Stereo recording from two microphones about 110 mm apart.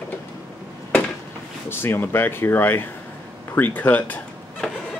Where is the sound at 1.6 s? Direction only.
20° left (ahead or behind).